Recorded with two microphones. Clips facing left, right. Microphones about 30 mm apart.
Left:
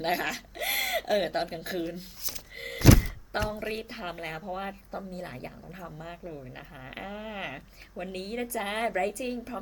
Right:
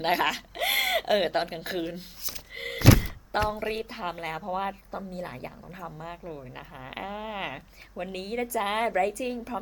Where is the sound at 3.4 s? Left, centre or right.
Centre.